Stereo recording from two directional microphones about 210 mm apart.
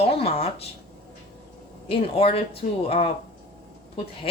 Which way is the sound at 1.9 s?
25° left (ahead or behind).